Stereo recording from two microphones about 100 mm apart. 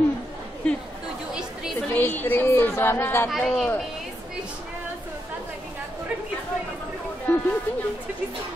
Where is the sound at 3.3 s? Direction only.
Centre (ahead or behind).